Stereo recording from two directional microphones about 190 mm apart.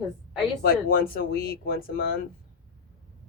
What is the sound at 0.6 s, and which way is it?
Speech, 50° left (ahead or behind).